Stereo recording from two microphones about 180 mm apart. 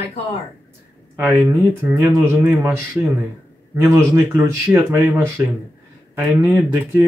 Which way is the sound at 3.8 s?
15° right (ahead or behind).